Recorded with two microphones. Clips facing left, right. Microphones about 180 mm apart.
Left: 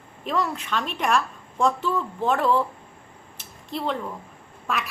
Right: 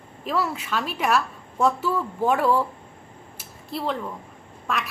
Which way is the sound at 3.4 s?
Centre (ahead or behind).